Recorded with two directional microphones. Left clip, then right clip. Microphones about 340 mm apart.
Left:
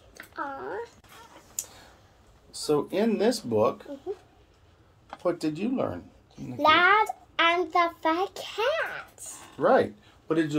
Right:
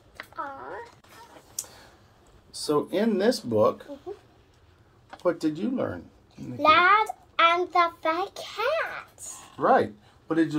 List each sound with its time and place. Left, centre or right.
2.6 s speech: centre
5.2 s speech: centre
6.6 s a child's voice: centre
9.6 s speech: centre